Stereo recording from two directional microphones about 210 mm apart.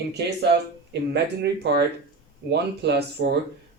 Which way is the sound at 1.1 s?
55° right (ahead or behind).